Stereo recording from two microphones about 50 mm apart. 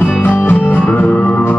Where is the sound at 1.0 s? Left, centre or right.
Left.